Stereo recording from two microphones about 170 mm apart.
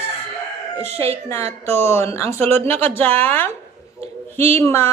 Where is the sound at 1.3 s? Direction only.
15° left (ahead or behind).